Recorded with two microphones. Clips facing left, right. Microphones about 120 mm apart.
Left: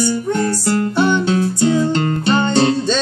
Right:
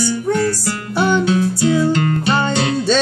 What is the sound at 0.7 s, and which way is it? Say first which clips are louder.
Music: left 3 dB; 30° left (ahead or behind).